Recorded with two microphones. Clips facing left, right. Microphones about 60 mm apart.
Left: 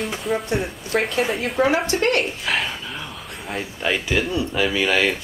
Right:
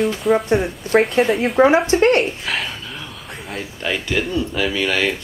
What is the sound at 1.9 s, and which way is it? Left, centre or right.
Speech, right.